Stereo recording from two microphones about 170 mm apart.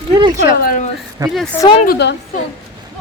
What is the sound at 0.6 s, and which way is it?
Speech, 55° left (ahead or behind).